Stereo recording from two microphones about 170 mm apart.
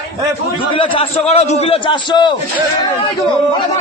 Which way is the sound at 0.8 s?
35° left (ahead or behind).